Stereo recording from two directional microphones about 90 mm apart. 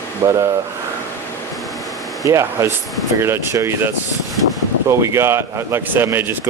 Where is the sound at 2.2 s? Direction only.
35° right (ahead or behind).